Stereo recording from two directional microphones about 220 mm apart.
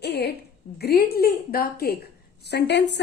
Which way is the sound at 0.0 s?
50° left (ahead or behind).